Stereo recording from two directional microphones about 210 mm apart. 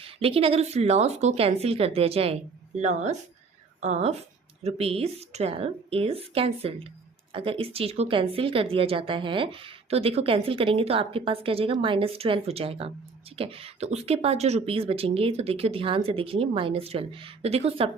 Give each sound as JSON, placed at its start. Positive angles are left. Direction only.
{"t": 0.0, "sound": "a woman's voice", "side_deg": -25}